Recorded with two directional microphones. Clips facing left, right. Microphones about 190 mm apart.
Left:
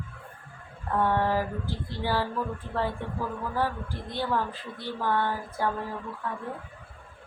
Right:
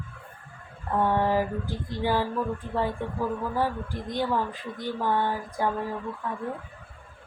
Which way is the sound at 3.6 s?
15° right (ahead or behind).